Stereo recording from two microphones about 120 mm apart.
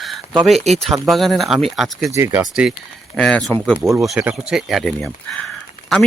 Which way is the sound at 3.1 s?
5° left (ahead or behind).